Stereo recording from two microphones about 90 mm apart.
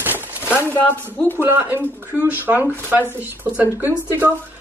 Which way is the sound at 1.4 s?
25° right (ahead or behind).